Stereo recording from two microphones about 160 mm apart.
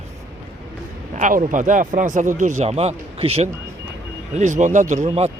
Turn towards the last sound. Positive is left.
turn(degrees=-40)  # may be behind; listen again after turning